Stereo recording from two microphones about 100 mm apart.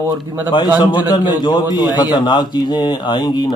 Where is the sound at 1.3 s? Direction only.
45° left (ahead or behind).